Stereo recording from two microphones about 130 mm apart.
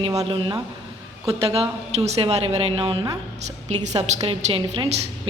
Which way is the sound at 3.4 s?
60° right (ahead or behind).